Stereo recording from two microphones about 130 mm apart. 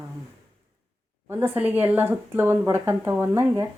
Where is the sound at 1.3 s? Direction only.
15° right (ahead or behind).